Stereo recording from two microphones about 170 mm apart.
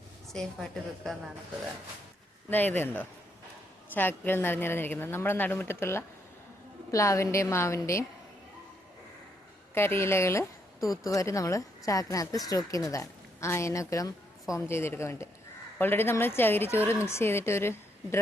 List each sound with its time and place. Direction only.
0.3 s a woman's voice: centre (ahead or behind)
2.5 s a woman's voice: 10° left (ahead or behind)
3.9 s a woman's voice: 10° left (ahead or behind)
9.7 s a woman's voice: 15° left (ahead or behind)